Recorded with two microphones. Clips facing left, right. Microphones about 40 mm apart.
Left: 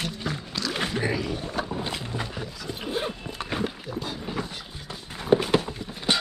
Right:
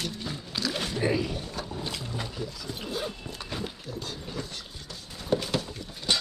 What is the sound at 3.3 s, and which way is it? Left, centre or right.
Music, left.